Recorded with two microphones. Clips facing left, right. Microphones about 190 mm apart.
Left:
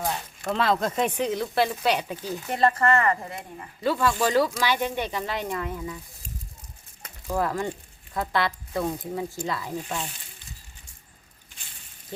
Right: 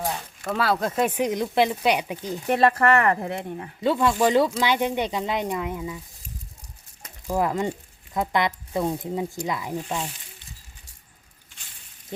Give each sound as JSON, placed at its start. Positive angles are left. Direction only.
{"t": 0.0, "sound": "speech", "side_deg": -5}
{"t": 2.5, "sound": "speech", "side_deg": -65}
{"t": 3.8, "sound": "speech", "side_deg": -20}
{"t": 7.3, "sound": "speech", "side_deg": -15}